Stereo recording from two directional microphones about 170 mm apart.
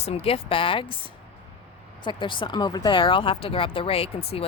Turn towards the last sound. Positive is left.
turn(degrees=35)  # may be behind; listen again after turning